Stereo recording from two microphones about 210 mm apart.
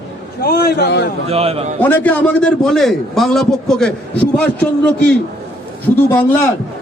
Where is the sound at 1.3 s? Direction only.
30° right (ahead or behind).